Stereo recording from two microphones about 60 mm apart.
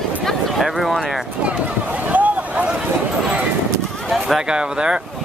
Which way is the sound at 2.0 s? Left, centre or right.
Right.